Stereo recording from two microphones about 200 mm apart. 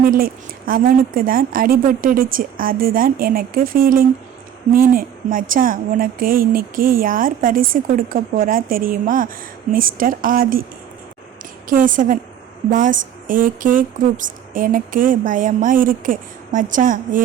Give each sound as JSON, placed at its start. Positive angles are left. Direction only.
{"t": 0.0, "sound": "a woman's voice", "side_deg": -45}
{"t": 11.7, "sound": "speech", "side_deg": -40}